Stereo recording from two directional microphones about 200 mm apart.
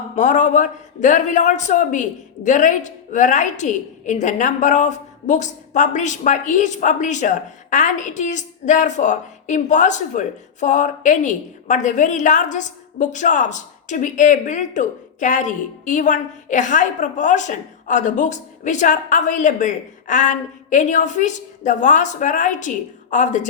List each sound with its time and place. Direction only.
0.2 s a man's voice: 40° left (ahead or behind)